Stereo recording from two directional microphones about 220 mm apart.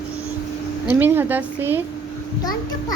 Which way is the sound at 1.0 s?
10° right (ahead or behind).